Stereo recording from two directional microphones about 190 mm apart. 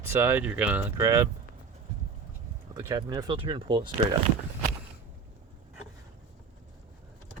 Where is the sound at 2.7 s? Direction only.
20° right (ahead or behind).